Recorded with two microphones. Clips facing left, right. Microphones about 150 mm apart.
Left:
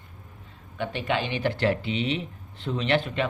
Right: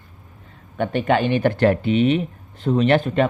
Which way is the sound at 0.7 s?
50° right (ahead or behind).